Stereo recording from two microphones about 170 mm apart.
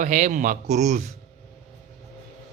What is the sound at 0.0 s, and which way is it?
Speech, 50° right (ahead or behind).